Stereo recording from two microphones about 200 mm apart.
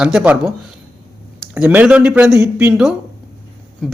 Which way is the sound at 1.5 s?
5° right (ahead or behind).